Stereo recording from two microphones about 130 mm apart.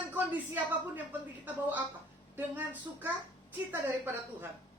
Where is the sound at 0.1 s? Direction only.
15° right (ahead or behind).